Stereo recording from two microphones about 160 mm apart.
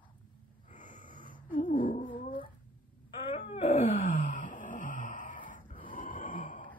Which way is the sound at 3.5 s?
35° left (ahead or behind).